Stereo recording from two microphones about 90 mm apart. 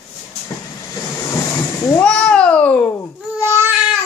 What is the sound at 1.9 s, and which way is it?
Cat, 10° left (ahead or behind).